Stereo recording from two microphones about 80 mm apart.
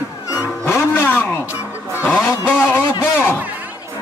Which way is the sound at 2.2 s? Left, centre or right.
Left.